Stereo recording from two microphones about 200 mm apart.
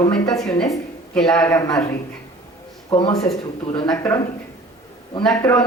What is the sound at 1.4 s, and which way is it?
Speech, 15° left (ahead or behind).